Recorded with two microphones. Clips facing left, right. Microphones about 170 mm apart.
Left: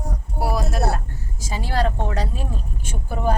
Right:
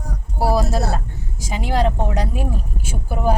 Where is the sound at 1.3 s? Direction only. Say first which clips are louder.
Right 3 dB; 15° right (ahead or behind).